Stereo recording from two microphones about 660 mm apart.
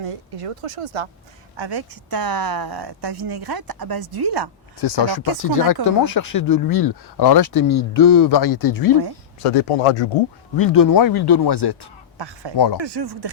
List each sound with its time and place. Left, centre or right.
0.0 s speech: right
1.5 s speech: right
4.8 s speech: left
9.4 s speech: left
10.6 s speech: left
12.8 s speech: right